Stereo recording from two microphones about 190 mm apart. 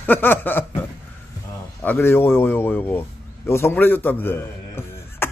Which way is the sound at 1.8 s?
10° left (ahead or behind).